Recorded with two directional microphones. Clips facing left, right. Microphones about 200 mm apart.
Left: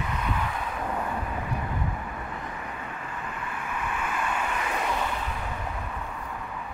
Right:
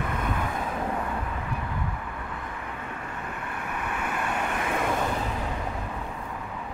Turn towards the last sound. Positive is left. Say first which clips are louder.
# right 2 dB
turn(degrees=-50)  # may be behind; listen again after turning